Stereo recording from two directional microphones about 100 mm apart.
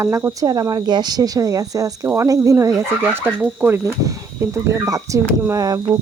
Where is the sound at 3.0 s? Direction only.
20° right (ahead or behind).